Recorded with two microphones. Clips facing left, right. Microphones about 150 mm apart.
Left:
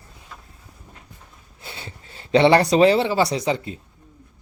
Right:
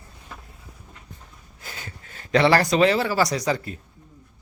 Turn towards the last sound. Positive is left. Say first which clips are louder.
# left 2 dB
turn(degrees=25)  # may be behind; listen again after turning